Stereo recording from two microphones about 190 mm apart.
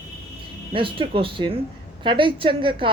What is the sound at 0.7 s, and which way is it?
A woman's voice, 25° right (ahead or behind).